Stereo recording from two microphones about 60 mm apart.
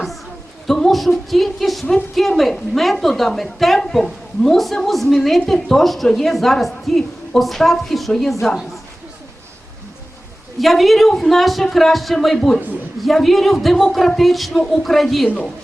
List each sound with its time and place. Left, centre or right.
0.7 s a woman's voice: centre
10.6 s a woman's voice: centre